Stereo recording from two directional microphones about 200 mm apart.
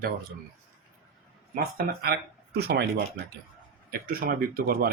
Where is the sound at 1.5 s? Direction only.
50° right (ahead or behind).